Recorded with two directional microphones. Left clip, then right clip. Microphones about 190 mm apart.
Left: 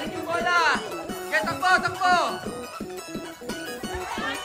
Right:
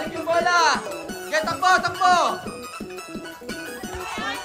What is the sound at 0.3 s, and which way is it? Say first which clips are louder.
Music: right 4 dB; 15° right (ahead or behind).